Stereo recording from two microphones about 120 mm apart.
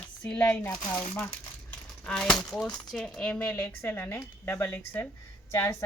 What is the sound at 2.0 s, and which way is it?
A woman's voice, 5° left (ahead or behind).